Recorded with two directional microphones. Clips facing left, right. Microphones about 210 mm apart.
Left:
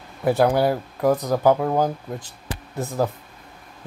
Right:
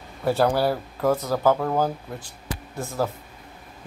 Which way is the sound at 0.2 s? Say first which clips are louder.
Left 3 dB; 15° left (ahead or behind).